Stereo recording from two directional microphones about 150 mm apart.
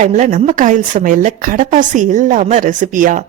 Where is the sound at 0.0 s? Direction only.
55° right (ahead or behind).